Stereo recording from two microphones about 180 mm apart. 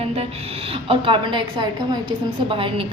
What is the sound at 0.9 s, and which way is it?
A woman's voice, 30° right (ahead or behind).